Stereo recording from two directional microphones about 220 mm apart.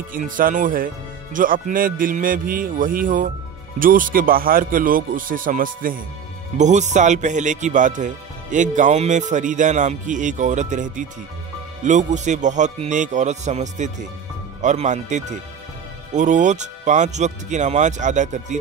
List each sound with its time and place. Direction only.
0.1 s speech: 40° right (ahead or behind)